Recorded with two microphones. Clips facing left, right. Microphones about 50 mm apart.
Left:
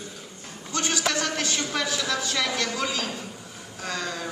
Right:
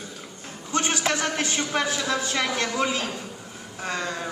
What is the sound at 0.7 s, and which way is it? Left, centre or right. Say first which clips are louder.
A man's voice: right 2 dB; right.